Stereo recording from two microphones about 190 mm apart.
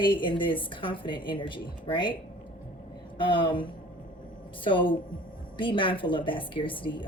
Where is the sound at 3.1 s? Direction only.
25° left (ahead or behind).